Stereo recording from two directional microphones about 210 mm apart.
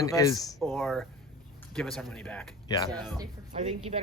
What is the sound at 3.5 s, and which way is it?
Speech, 30° right (ahead or behind).